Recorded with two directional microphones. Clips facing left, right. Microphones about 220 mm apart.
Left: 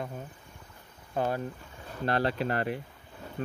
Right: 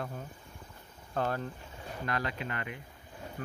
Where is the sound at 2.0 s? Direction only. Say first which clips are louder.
Left 8 dB; 30° left (ahead or behind).